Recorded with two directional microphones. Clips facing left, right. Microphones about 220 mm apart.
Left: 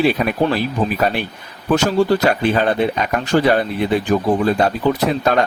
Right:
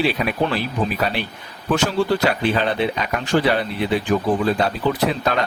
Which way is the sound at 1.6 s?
40° left (ahead or behind).